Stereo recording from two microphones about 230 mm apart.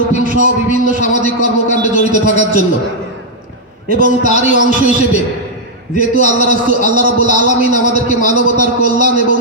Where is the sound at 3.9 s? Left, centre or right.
Right.